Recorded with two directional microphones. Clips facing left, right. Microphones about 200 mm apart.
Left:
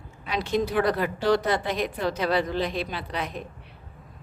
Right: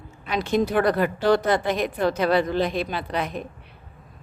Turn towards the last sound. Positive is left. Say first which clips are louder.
# right 4 dB
turn(degrees=-50)  # may be behind; listen again after turning